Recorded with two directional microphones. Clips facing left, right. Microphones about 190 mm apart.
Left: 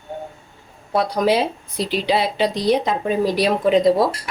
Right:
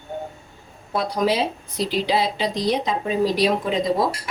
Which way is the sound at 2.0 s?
65° left (ahead or behind).